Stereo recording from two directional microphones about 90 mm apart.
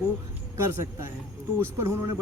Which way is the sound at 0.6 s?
30° right (ahead or behind).